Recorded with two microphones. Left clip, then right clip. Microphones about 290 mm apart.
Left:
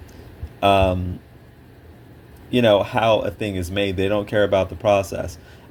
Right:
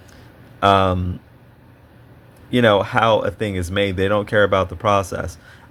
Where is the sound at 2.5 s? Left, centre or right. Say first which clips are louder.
Right 1 dB; right.